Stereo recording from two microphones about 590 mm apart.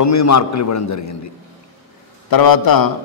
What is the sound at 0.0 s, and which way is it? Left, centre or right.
A man's voice, left.